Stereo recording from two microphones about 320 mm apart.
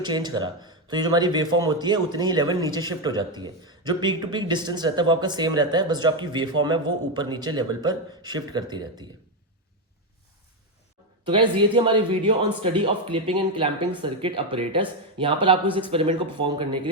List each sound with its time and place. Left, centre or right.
0.0 s speech: centre
11.3 s speech: centre